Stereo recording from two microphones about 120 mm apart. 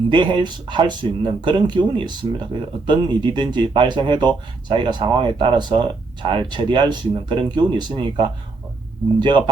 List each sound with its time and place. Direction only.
0.1 s speech: 40° right (ahead or behind)